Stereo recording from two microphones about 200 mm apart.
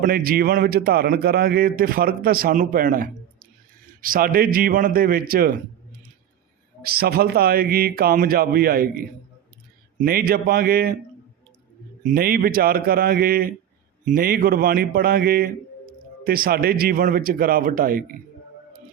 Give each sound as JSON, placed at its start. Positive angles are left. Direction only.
{"t": 0.0, "sound": "a man's voice", "side_deg": -45}
{"t": 6.8, "sound": "a man's voice", "side_deg": -50}
{"t": 12.0, "sound": "a man's voice", "side_deg": -45}